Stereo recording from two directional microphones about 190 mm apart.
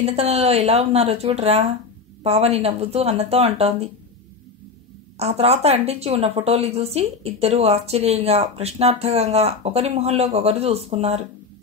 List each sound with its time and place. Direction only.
0.0 s a woman's voice: 35° right (ahead or behind)
5.1 s a woman's voice: 35° right (ahead or behind)